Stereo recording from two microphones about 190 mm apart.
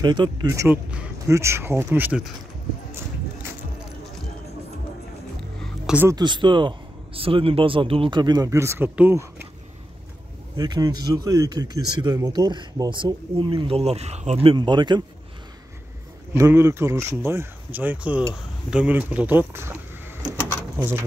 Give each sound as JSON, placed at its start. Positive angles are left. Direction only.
{"t": 0.0, "sound": "speech", "side_deg": -25}
{"t": 5.6, "sound": "music", "side_deg": -5}
{"t": 6.0, "sound": "speech", "side_deg": -20}
{"t": 10.5, "sound": "speech", "side_deg": -20}
{"t": 16.3, "sound": "speech", "side_deg": -15}